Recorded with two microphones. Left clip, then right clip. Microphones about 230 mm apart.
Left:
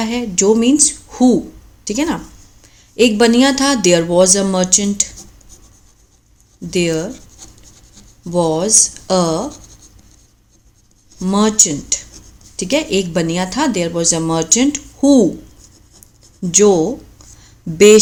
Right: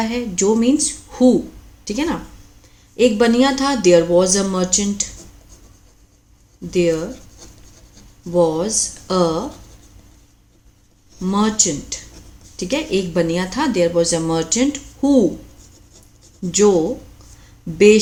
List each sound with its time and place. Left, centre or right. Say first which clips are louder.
0.0 s a woman's voice: left 3 dB; left
6.7 s speech: even; left
8.3 s speech: left 2 dB; left
11.2 s speech: left 4 dB; left
16.4 s speech: left 3 dB; left
17.7 s speech: left 4 dB; left